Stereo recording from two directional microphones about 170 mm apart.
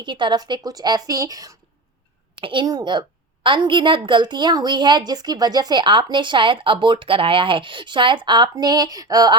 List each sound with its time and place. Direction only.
0.0 s a woman's voice: 25° right (ahead or behind)